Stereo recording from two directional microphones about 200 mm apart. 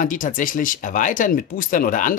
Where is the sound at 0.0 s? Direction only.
40° left (ahead or behind).